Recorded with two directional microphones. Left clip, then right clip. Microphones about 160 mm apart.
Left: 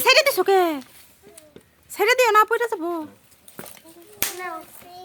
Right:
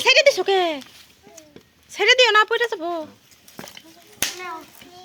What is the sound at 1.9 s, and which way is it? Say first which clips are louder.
A woman's voice: right 2 dB; 30° left (ahead or behind).